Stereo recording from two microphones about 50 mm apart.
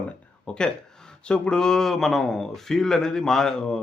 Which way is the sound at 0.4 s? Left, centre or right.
Centre.